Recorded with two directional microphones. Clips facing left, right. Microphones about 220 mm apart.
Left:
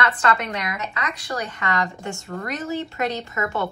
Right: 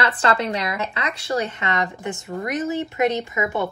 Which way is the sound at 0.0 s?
30° right (ahead or behind).